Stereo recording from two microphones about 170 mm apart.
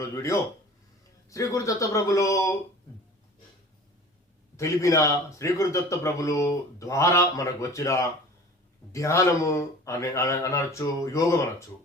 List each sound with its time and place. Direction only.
0.0 s speech: 15° left (ahead or behind)
4.5 s speech: 15° left (ahead or behind)